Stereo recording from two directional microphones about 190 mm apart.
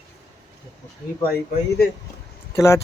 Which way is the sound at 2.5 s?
15° left (ahead or behind).